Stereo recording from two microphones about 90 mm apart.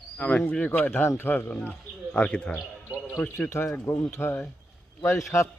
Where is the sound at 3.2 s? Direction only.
25° left (ahead or behind).